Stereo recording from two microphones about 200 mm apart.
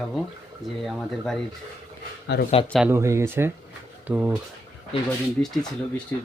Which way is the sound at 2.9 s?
15° right (ahead or behind).